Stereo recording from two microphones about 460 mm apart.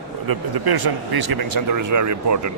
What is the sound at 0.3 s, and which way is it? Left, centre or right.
A man's voice, right.